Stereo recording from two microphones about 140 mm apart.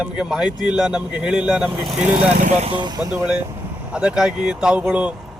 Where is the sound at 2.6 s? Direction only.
40° right (ahead or behind).